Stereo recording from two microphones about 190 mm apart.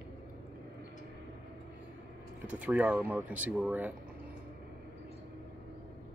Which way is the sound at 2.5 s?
5° right (ahead or behind).